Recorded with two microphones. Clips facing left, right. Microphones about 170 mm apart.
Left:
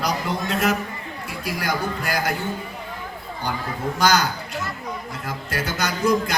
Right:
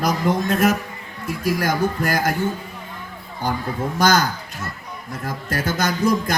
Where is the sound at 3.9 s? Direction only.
45° right (ahead or behind).